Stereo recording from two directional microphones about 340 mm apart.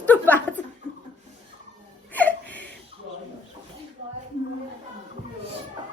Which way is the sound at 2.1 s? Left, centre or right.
Centre.